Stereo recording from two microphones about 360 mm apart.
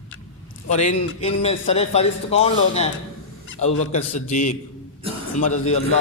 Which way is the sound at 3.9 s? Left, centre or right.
Centre.